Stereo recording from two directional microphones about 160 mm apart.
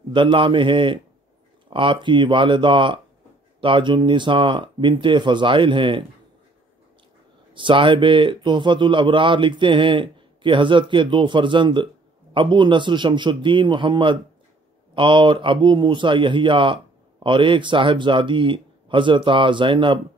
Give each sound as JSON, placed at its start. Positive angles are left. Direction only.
{"t": 0.1, "sound": "a man's voice", "side_deg": -30}
{"t": 7.5, "sound": "a man's voice", "side_deg": -30}